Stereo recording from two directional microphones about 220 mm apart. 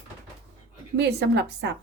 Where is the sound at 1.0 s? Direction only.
50° right (ahead or behind).